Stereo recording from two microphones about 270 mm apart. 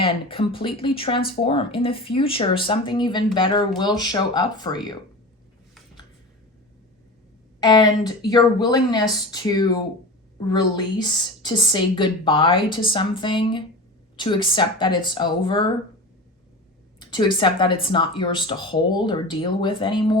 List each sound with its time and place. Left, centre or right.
0.0 s a woman's voice: centre
7.6 s a woman's voice: centre
17.0 s a woman's voice: centre